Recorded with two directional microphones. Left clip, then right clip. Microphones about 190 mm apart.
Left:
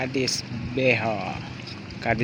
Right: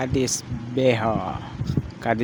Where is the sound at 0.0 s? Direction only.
25° right (ahead or behind).